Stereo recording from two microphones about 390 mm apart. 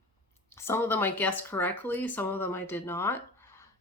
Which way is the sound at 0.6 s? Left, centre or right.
Centre.